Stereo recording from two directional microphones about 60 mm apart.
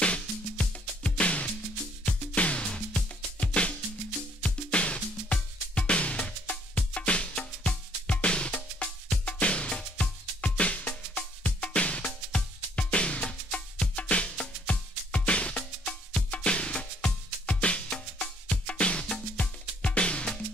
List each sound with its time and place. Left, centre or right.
0.0 s music: centre